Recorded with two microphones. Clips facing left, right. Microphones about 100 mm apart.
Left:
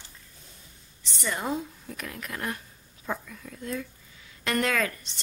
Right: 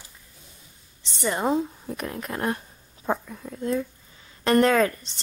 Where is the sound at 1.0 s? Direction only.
25° right (ahead or behind).